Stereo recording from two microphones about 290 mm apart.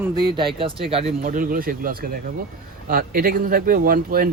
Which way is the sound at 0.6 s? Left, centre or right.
Centre.